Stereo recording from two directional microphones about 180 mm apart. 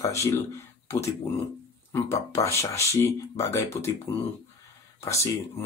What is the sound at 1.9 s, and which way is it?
Speech, 15° left (ahead or behind).